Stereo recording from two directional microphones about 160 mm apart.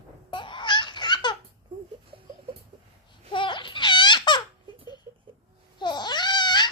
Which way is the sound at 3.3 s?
30° left (ahead or behind).